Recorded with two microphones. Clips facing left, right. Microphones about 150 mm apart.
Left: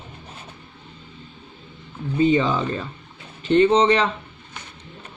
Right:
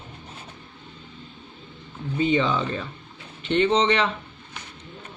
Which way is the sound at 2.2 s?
40° left (ahead or behind).